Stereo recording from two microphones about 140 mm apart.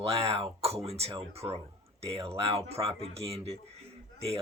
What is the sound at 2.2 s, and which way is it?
Speech, 45° right (ahead or behind).